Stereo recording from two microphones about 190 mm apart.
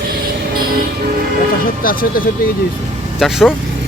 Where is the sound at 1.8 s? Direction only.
50° left (ahead or behind).